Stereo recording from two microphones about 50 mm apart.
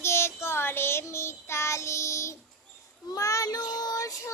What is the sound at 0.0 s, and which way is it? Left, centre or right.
Child singing, left.